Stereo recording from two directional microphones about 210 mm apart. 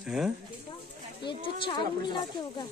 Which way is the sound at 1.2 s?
20° left (ahead or behind).